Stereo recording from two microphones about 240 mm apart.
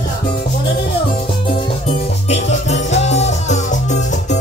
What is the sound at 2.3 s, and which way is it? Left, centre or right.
Music, left.